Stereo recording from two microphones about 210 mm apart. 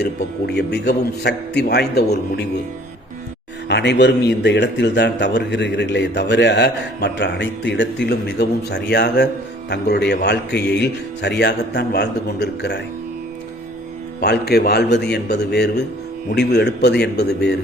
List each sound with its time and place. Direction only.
0.0 s a man's voice: 50° left (ahead or behind)
3.7 s a man's voice: 55° left (ahead or behind)
14.2 s a man's voice: 50° left (ahead or behind)